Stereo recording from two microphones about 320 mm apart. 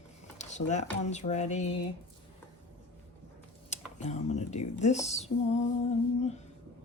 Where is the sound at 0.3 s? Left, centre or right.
Left.